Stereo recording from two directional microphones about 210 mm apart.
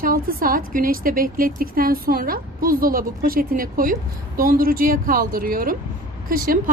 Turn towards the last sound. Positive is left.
turn(degrees=-45)  # may be behind; listen again after turning